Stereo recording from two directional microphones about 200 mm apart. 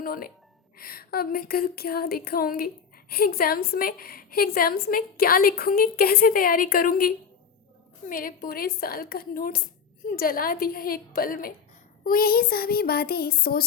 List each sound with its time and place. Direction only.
0.0 s a woman's voice: 45° left (ahead or behind)
8.1 s a woman's voice: 45° left (ahead or behind)